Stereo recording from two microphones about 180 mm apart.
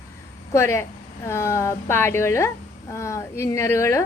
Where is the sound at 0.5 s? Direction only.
15° left (ahead or behind).